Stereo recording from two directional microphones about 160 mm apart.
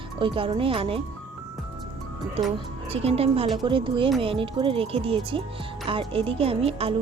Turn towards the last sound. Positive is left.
turn(degrees=-40)  # may be behind; listen again after turning